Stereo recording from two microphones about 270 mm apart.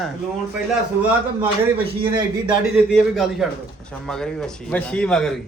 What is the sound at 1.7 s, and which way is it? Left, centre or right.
Speech, centre.